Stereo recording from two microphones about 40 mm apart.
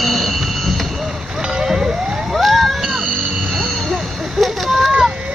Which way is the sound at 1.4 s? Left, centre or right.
Centre.